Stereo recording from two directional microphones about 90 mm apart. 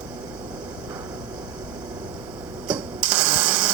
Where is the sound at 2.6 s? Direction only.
15° right (ahead or behind).